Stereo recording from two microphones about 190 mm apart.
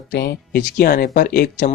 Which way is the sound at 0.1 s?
55° left (ahead or behind).